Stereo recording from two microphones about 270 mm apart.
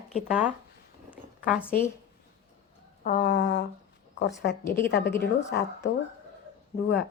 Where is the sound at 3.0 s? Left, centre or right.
Left.